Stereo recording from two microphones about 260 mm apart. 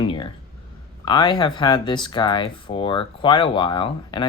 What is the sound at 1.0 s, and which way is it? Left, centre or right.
Speech, centre.